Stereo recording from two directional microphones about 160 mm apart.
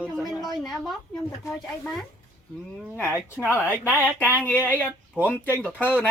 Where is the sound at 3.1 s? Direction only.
15° left (ahead or behind).